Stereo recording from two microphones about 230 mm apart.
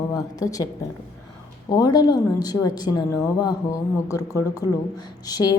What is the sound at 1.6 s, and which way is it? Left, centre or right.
Speech, centre.